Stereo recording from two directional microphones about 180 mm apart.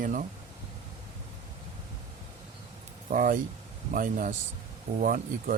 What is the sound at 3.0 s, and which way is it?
Speech, 45° right (ahead or behind).